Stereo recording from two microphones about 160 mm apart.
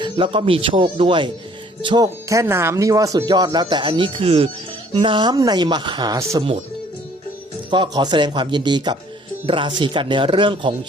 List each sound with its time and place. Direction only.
0.0 s speech: 35° right (ahead or behind)
2.3 s speech: 15° right (ahead or behind)
7.7 s speech: 25° right (ahead or behind)